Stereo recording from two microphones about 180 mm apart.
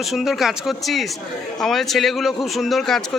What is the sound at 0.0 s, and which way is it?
Speech, centre (ahead or behind).